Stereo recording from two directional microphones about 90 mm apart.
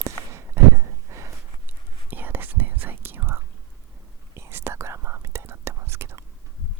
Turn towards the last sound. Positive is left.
turn(degrees=-30)  # may be behind; listen again after turning